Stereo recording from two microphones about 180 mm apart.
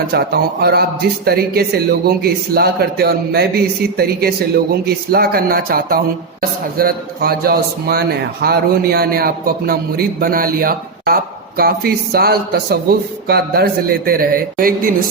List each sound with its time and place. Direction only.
0.1 s speech: 65° right (ahead or behind)